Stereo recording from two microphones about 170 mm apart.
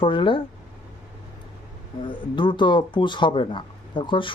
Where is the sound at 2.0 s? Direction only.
30° left (ahead or behind).